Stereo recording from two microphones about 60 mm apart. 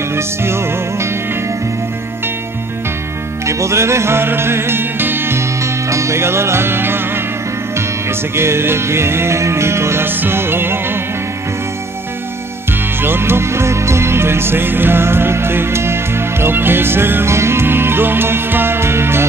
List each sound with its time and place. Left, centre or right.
0.1 s music: right
3.4 s music: right
5.6 s music: right
8.4 s music: right
10.0 s music: right
13.0 s speech: right